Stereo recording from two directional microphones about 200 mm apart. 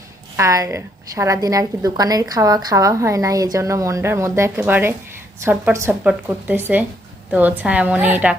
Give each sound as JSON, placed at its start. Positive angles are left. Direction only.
{"t": 0.3, "sound": "a woman's voice", "side_deg": -15}